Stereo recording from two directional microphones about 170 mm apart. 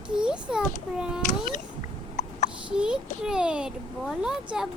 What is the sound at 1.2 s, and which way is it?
Speech, 45° left (ahead or behind).